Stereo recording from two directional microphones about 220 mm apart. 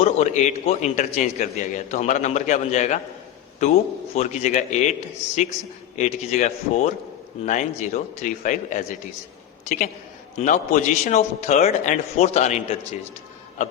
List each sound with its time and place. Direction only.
0.0 s a man's voice: 30° left (ahead or behind)
10.3 s a man's voice: 35° left (ahead or behind)